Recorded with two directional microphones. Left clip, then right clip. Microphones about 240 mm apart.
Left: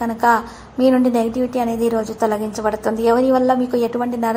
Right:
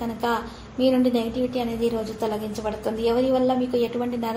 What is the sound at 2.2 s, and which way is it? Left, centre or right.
A woman's voice, left.